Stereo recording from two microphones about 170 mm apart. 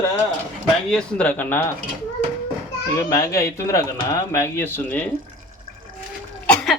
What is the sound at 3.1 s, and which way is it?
Speech, 20° left (ahead or behind).